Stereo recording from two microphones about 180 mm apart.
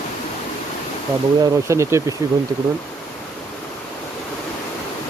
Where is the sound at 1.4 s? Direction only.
15° right (ahead or behind).